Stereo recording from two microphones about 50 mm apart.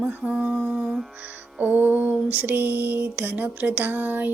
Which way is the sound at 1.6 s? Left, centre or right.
Right.